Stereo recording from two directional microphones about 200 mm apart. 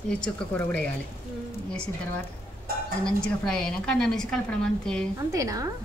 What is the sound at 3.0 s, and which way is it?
A woman's voice, 5° left (ahead or behind).